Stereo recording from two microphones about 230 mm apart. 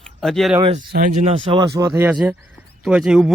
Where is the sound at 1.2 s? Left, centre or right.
Right.